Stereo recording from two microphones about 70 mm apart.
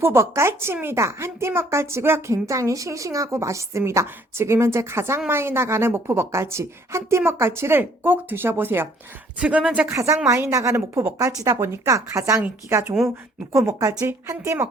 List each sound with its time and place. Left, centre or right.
0.0 s a woman's voice: right
9.4 s speech: centre
9.8 s a woman's voice: right
13.1 s a woman's voice: right
14.1 s a woman's voice: right